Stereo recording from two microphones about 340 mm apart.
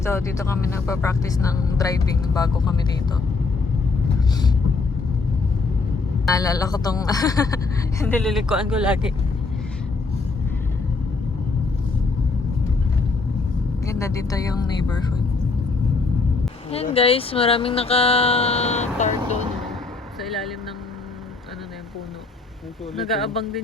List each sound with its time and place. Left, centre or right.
0.0 s speech: centre
6.2 s speech: centre
13.8 s speech: centre
16.7 s speech: centre
20.2 s vehicle: centre
23.1 s speech: centre